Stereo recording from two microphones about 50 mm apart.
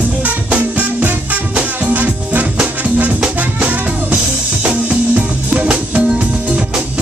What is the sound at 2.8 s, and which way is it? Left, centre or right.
Music, right.